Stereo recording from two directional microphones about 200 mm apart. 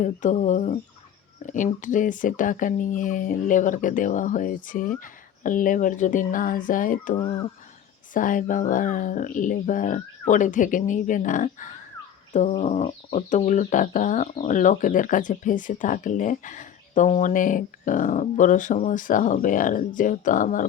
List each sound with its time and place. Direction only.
0.0 s speech: 40° left (ahead or behind)
7.2 s speech: 25° left (ahead or behind)
8.1 s speech: 40° left (ahead or behind)